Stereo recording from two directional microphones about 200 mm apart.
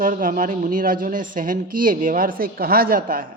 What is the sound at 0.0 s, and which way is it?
A man's voice, 45° right (ahead or behind).